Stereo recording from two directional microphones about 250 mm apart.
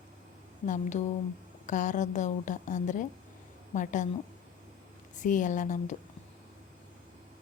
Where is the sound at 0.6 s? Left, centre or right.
Left.